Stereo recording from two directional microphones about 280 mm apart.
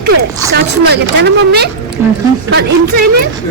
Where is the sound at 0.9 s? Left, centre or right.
Right.